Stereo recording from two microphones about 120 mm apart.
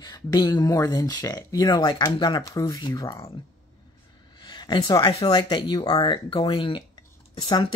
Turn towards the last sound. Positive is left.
turn(degrees=50)  # may be behind; listen again after turning